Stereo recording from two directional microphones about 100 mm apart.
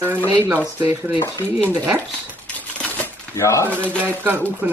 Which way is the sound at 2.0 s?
15° left (ahead or behind).